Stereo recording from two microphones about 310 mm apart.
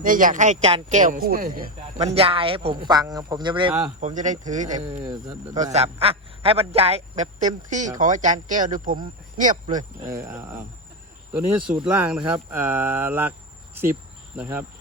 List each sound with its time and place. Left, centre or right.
0.0 s speech: right
5.0 s speech: centre
10.1 s speech: centre
14.3 s speech: centre